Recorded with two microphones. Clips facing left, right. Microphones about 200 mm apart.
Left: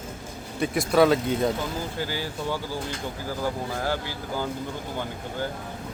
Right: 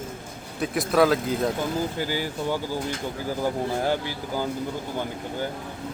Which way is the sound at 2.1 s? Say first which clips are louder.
Right 3 dB; 15° right (ahead or behind).